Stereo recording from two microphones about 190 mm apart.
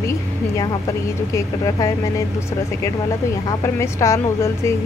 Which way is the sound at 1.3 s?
20° left (ahead or behind).